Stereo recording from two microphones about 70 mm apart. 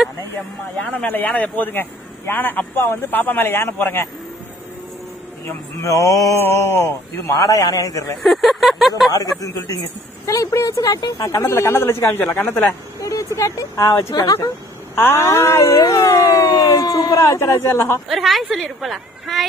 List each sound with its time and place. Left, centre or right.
1.0 s a man's voice: left
5.8 s speech: left
6.4 s speech: left
7.3 s a man's voice: left
8.2 s a sound: centre
9.1 s a man's voice: left
13.0 s speech: left
14.1 s a man's voice: left
15.0 s speech: left
18.0 s a woman's voice: centre